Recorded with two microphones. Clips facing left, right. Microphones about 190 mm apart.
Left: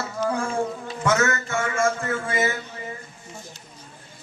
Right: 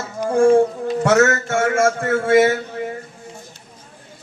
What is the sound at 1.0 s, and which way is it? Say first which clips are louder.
Speech: right 7 dB; 70° right (ahead or behind).